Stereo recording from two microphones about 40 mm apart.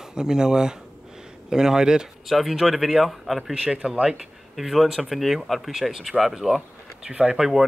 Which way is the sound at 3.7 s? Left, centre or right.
Right.